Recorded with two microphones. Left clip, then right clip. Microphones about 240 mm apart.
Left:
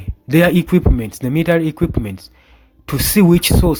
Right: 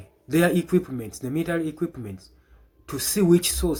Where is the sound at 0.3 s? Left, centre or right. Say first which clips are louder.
Left 8 dB; left.